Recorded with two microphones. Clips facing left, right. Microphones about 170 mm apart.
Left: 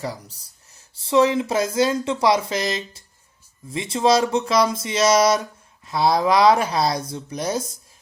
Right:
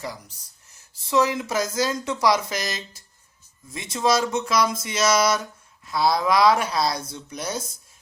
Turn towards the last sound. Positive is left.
turn(degrees=35)  # may be behind; listen again after turning